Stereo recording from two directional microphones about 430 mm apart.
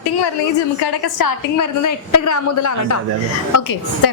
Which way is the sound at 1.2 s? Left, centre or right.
Left.